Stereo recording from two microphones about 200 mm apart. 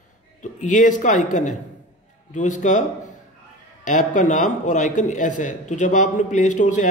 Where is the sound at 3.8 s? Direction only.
40° left (ahead or behind).